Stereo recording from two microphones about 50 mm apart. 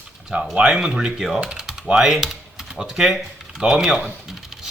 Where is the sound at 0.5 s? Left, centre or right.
Centre.